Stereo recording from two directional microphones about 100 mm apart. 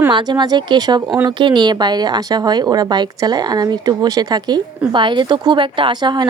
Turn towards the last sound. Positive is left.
turn(degrees=-45)  # may be behind; listen again after turning